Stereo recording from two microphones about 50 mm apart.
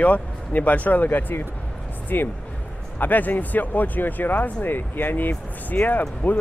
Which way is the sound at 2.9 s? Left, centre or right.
Left.